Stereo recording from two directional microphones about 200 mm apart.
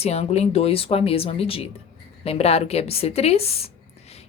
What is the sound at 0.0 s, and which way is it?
A woman's voice, 30° left (ahead or behind).